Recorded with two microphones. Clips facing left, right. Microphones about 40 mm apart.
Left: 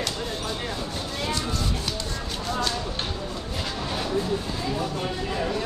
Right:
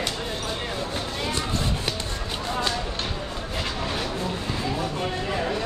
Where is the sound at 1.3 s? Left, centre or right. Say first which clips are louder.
Right 1 dB; right.